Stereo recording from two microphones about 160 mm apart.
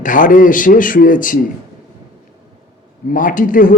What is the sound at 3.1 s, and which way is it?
Speech, 55° left (ahead or behind).